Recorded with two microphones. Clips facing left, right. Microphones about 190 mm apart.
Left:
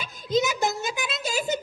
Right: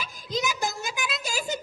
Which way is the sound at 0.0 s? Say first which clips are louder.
Left 6 dB; 25° left (ahead or behind).